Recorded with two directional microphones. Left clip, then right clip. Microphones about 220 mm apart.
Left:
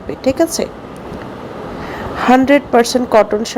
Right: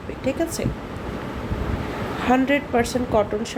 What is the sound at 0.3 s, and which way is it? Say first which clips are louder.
Speech: left 10 dB; 25° left (ahead or behind).